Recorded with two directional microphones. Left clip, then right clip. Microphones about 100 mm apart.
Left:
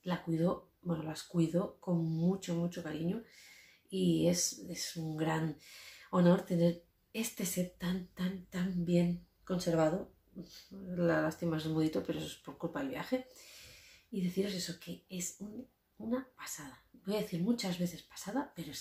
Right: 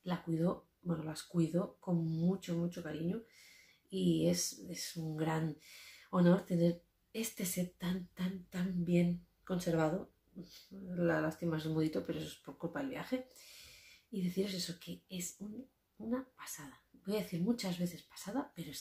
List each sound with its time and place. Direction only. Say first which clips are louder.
0.0 s speech: left 3 dB; 15° right (ahead or behind)
2.1 s speech: left 2 dB; 5° right (ahead or behind); by 9.8 s 30° right (ahead or behind)
11.0 s speech: left 2 dB; 15° right (ahead or behind)